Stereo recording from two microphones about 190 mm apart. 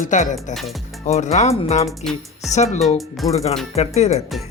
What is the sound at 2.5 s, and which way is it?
Speech, 35° left (ahead or behind).